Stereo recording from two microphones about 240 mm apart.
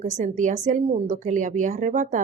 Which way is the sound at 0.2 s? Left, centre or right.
Right.